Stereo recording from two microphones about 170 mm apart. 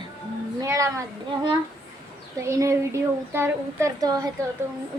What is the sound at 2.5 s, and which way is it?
Speech, 15° right (ahead or behind).